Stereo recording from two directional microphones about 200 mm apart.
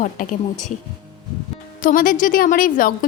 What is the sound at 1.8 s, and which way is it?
A woman's voice, 45° left (ahead or behind).